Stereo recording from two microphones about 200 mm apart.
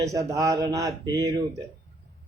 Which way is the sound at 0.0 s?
15° right (ahead or behind).